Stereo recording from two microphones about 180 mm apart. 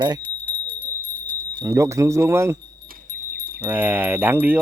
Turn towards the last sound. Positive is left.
turn(degrees=-10)  # may be behind; listen again after turning